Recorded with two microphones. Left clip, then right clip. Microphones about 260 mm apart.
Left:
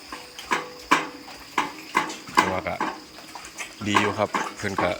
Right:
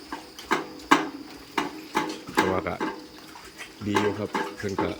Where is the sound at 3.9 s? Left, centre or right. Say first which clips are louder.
Left 4 dB; centre.